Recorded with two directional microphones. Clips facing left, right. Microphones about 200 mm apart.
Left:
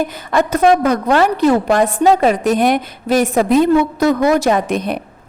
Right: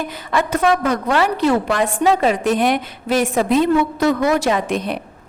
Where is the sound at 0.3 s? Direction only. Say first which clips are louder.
Left 4 dB; 40° left (ahead or behind).